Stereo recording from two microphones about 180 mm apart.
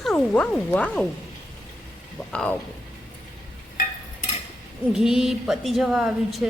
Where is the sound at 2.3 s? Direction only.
5° left (ahead or behind).